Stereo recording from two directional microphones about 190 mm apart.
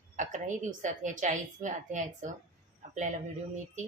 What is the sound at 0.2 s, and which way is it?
Speech, 40° right (ahead or behind).